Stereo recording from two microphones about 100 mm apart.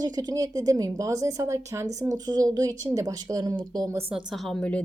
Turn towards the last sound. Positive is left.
turn(degrees=10)  # may be behind; listen again after turning